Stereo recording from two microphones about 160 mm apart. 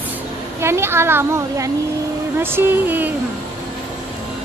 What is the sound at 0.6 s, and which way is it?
Speech, 15° right (ahead or behind).